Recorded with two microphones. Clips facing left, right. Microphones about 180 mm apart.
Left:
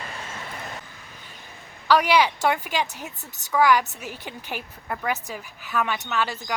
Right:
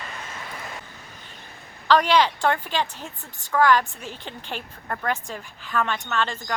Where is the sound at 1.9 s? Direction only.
10° left (ahead or behind).